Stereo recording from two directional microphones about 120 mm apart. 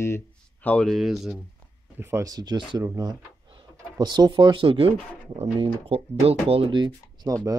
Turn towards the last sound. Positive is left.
turn(degrees=-40)  # may be behind; listen again after turning